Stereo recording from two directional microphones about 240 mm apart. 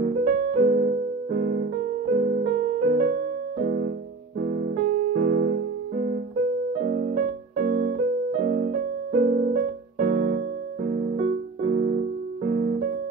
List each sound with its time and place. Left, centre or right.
0.0 s piano: right
5.1 s keyboard: right
6.7 s music: right